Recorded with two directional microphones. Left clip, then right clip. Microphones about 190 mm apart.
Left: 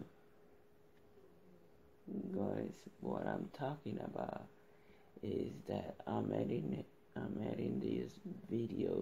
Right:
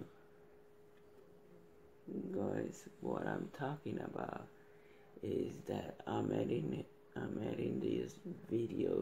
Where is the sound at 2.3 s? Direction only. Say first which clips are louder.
Right 1 dB; 5° right (ahead or behind).